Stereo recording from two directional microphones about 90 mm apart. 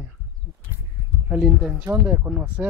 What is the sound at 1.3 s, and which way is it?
Speech, 10° right (ahead or behind).